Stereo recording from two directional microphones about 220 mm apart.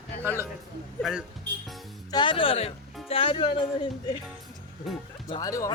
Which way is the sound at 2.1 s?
20° left (ahead or behind).